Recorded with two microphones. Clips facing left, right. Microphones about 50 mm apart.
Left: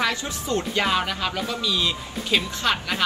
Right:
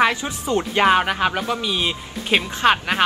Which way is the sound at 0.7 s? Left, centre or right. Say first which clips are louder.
Right 9 dB; right.